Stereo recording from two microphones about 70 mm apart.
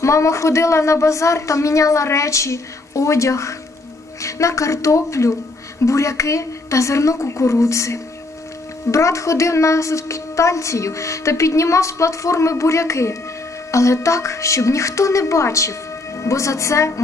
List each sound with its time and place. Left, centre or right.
0.0 s a woman's voice: left